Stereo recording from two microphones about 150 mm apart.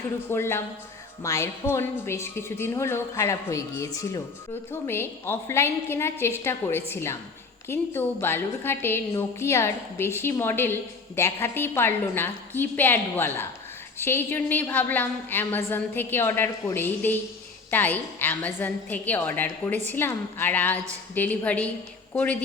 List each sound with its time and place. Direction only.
0.3 s a woman's voice: 15° left (ahead or behind)